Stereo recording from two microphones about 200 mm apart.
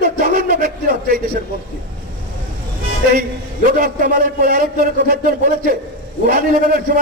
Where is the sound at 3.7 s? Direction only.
45° right (ahead or behind).